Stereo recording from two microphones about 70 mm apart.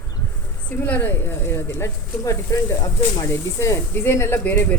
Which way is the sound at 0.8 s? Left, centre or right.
Left.